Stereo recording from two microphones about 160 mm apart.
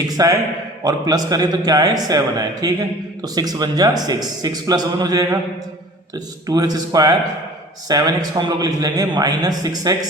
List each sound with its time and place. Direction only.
0.2 s a man's voice: 25° right (ahead or behind)